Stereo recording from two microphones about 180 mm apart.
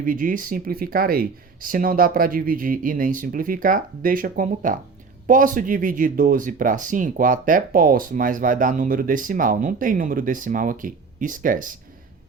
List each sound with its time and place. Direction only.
0.0 s speech: 50° right (ahead or behind)